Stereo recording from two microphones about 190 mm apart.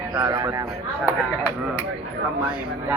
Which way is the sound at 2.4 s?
5° right (ahead or behind).